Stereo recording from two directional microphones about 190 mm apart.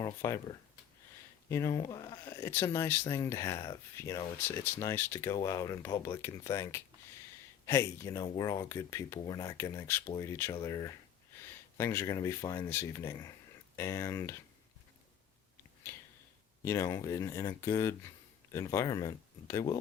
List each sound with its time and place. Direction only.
0.0 s speech: 15° left (ahead or behind)
16.6 s speech: 15° left (ahead or behind)